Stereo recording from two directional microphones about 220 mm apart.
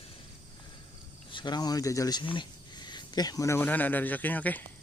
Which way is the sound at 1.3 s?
20° left (ahead or behind).